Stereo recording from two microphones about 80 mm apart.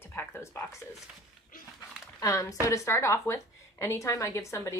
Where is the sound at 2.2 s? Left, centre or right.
Left.